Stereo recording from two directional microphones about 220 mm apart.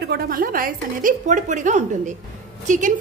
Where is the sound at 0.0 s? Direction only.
45° right (ahead or behind).